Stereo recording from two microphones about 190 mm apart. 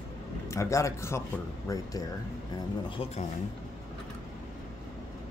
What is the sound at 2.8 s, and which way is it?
Speech, 30° left (ahead or behind).